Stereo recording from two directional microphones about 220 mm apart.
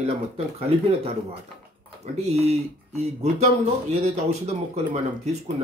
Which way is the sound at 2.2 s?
30° right (ahead or behind).